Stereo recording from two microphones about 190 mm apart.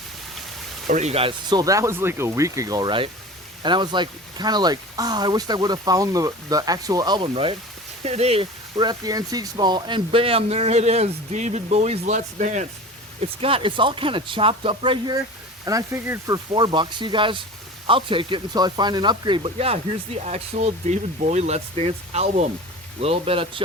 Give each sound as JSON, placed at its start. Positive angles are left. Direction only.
{"t": 0.9, "sound": "speech", "side_deg": -40}
{"t": 8.7, "sound": "speech", "side_deg": -20}
{"t": 13.4, "sound": "speech", "side_deg": -30}